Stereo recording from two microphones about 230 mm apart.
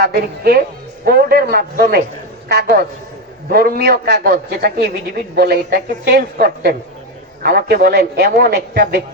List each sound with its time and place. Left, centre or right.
0.0 s a man's voice: right